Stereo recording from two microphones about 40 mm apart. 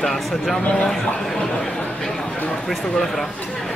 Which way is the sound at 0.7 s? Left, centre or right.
Centre.